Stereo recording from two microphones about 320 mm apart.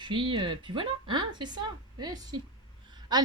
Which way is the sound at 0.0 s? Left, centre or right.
Centre.